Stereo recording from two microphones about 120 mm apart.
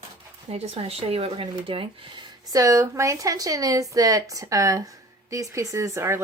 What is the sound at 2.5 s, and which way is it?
Speech, 25° right (ahead or behind).